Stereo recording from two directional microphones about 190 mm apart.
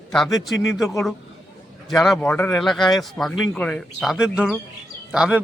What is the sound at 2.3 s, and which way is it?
Speech, 15° left (ahead or behind).